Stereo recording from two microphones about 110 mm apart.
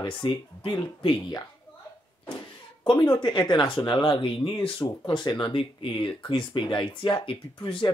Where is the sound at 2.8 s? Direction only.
40° left (ahead or behind).